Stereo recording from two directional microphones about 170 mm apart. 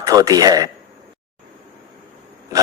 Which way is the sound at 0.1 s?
20° right (ahead or behind).